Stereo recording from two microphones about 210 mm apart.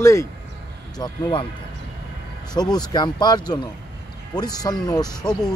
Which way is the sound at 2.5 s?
20° left (ahead or behind).